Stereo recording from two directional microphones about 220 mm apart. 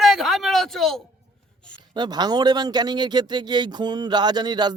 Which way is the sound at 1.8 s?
20° right (ahead or behind).